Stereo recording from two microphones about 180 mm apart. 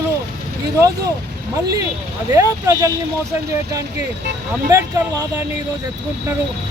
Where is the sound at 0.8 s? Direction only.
20° right (ahead or behind).